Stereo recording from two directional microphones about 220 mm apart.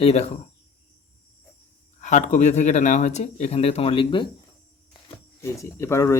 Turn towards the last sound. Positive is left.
turn(degrees=15)  # may be behind; listen again after turning